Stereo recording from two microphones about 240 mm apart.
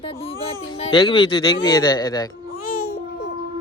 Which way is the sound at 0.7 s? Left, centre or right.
Left.